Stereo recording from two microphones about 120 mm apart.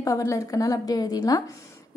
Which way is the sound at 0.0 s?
25° left (ahead or behind).